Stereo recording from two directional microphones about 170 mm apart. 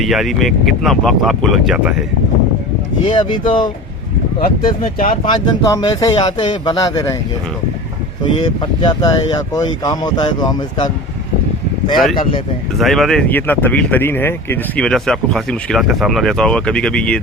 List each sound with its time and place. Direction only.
0.0 s speech: centre (ahead or behind)
3.1 s speech: 25° left (ahead or behind)
4.4 s speech: 55° left (ahead or behind)
5.2 s speech: 25° left (ahead or behind)
8.2 s speech: 25° left (ahead or behind)
12.8 s speech: centre (ahead or behind)